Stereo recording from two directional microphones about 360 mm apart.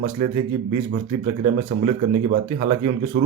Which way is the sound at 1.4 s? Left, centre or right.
Centre.